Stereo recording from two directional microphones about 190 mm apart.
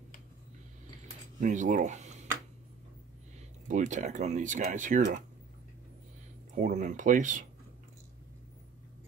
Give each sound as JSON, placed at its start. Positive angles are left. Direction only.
{"t": 1.4, "sound": "speech", "side_deg": -40}
{"t": 3.6, "sound": "speech", "side_deg": -40}
{"t": 6.5, "sound": "speech", "side_deg": -40}